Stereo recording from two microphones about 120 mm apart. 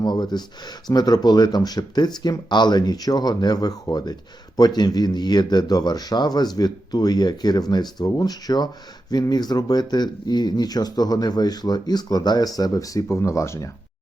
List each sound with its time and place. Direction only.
0.0 s speech: 35° left (ahead or behind)